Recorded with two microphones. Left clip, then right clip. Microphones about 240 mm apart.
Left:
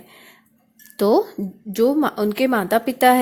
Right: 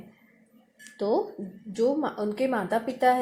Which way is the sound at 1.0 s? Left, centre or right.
Left.